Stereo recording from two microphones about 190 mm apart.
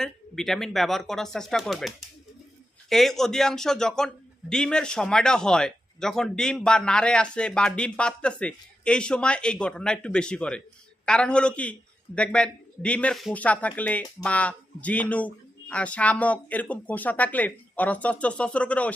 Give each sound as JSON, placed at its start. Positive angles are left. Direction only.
{"t": 0.0, "sound": "a man's voice", "side_deg": 0}
{"t": 2.9, "sound": "a man's voice", "side_deg": 0}